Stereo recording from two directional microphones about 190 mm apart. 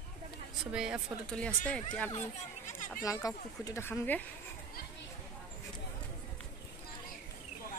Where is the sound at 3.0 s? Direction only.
20° left (ahead or behind).